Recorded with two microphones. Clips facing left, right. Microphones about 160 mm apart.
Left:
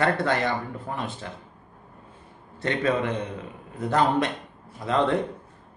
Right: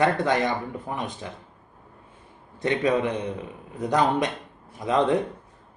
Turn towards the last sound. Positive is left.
turn(degrees=-15)  # may be behind; listen again after turning